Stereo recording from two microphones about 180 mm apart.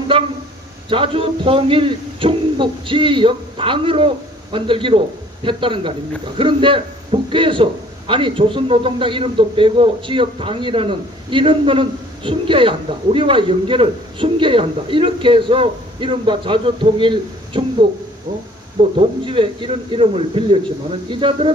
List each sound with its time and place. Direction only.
0.8 s a man's voice: 30° right (ahead or behind)